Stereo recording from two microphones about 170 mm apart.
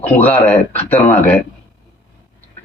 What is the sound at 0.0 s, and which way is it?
Speech, 10° left (ahead or behind).